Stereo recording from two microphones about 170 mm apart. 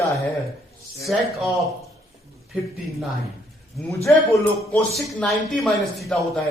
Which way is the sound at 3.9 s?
15° left (ahead or behind).